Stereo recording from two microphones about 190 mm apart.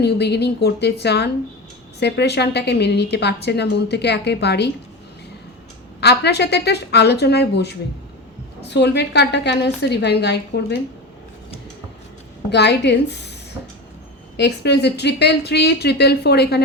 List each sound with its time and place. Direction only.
0.0 s a woman's voice: 60° left (ahead or behind)
6.0 s a woman's voice: 60° left (ahead or behind)
12.5 s a woman's voice: 65° left (ahead or behind)
14.3 s a woman's voice: 60° left (ahead or behind)